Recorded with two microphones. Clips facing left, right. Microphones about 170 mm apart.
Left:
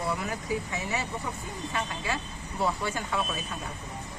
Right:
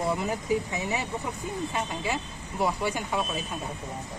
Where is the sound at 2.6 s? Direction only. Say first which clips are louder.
Right 2 dB; 15° right (ahead or behind).